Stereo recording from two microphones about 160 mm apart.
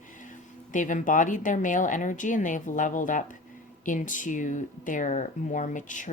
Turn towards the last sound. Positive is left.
turn(degrees=50)  # may be behind; listen again after turning